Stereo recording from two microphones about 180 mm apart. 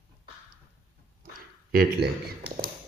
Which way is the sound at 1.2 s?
55° right (ahead or behind).